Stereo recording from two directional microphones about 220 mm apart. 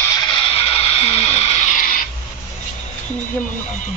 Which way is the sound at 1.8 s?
40° left (ahead or behind).